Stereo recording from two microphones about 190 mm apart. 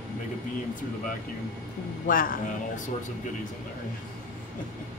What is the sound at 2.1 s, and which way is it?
Speech, 45° left (ahead or behind).